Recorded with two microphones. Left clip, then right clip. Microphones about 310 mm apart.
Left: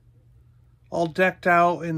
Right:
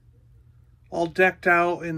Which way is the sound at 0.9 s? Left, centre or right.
Centre.